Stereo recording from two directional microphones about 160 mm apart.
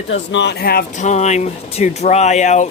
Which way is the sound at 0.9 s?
45° left (ahead or behind).